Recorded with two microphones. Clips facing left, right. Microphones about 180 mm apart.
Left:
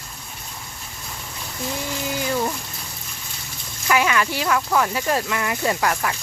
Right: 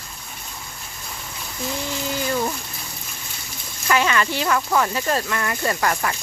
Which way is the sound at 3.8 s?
10° left (ahead or behind).